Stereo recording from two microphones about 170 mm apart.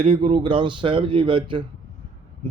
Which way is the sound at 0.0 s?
30° right (ahead or behind).